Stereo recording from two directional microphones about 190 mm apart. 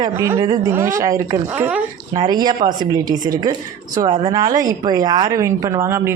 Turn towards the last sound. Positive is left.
turn(degrees=-15)  # may be behind; listen again after turning